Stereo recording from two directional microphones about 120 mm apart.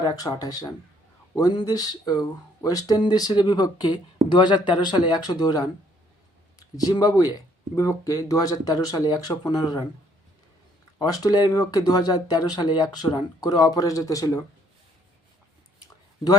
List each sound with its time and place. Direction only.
0.0 s speech: 30° left (ahead or behind)
6.8 s speech: 35° left (ahead or behind)
10.9 s speech: 30° left (ahead or behind)